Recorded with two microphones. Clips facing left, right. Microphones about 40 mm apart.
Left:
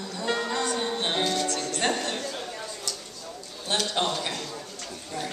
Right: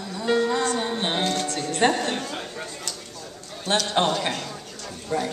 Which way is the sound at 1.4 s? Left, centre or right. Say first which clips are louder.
Right 5 dB; right.